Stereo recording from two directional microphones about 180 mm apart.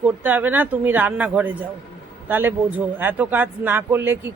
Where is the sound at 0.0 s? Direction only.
10° right (ahead or behind).